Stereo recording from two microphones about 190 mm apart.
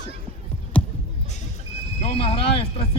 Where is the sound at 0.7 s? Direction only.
5° left (ahead or behind).